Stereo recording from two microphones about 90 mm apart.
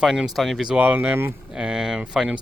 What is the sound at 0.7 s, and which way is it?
Speech, 15° right (ahead or behind).